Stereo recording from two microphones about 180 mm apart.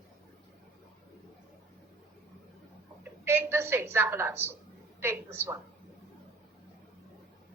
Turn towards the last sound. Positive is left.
turn(degrees=-15)  # may be behind; listen again after turning